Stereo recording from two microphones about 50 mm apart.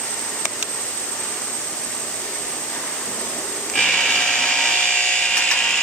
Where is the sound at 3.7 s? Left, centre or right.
Centre.